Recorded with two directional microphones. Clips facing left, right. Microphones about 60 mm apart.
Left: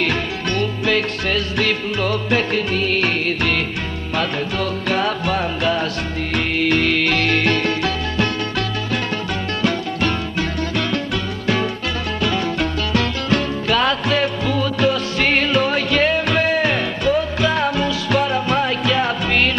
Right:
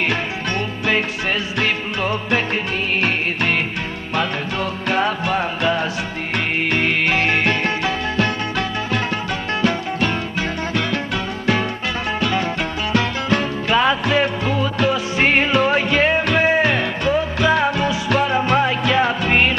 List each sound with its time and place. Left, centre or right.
0.0 s music: right
12.3 s music: right